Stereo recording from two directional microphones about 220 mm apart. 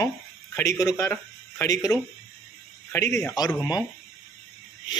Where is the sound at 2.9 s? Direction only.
15° left (ahead or behind).